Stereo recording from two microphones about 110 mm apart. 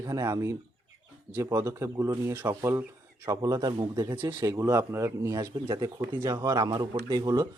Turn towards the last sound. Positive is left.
turn(degrees=-35)  # may be behind; listen again after turning